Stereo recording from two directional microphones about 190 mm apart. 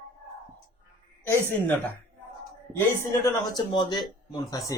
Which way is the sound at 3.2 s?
20° left (ahead or behind).